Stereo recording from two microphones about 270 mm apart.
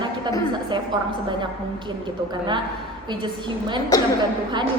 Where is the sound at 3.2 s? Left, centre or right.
Centre.